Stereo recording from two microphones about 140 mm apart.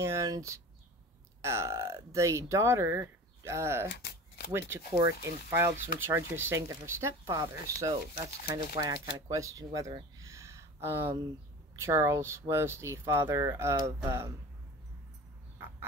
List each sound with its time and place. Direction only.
0.0 s speech: 20° right (ahead or behind)